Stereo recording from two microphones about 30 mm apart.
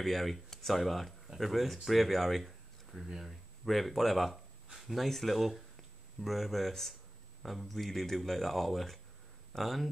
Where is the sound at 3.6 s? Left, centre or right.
Centre.